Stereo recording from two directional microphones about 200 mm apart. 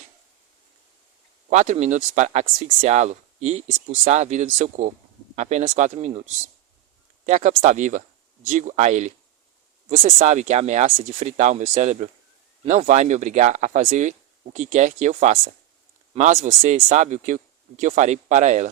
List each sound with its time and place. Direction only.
1.5 s speech: 35° right (ahead or behind)
7.3 s speech: 35° right (ahead or behind)